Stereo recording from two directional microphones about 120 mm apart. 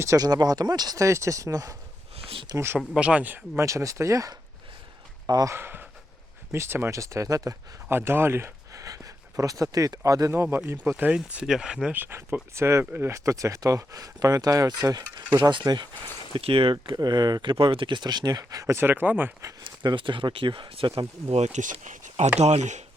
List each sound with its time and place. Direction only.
0.0 s speech: 25° right (ahead or behind)
2.1 s a sound: 50° right (ahead or behind)
2.6 s speech: 20° right (ahead or behind)
2.9 s speech: 10° right (ahead or behind); by 5.5 s 30° right (ahead or behind)
5.5 s speech: 20° right (ahead or behind); by 15.9 s 35° right (ahead or behind)
16.3 s speech: 45° right (ahead or behind)
16.8 s speech: 35° right (ahead or behind); by 19.5 s 15° right (ahead or behind)
19.5 s speech: 40° right (ahead or behind)
21.2 s speech: 65° right (ahead or behind); by 22.3 s 90° right
22.4 s speech: 70° right (ahead or behind)